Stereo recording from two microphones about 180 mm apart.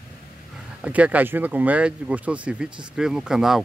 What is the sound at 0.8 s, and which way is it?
Speech, 5° right (ahead or behind).